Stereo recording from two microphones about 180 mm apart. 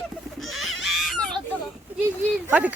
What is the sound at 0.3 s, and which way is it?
Baby cry, centre (ahead or behind).